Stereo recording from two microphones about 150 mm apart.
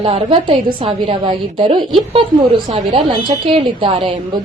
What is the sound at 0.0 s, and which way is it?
A woman's voice, 40° right (ahead or behind).